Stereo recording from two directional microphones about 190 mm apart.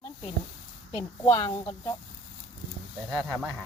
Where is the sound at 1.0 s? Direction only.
15° left (ahead or behind).